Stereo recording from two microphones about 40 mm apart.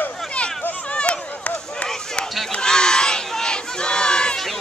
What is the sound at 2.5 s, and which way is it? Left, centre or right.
Crowd, centre.